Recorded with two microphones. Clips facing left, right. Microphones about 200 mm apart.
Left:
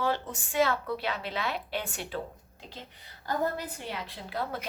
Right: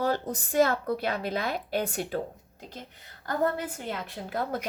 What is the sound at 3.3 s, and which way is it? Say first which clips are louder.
A woman's voice: right 3 dB; 50° right (ahead or behind).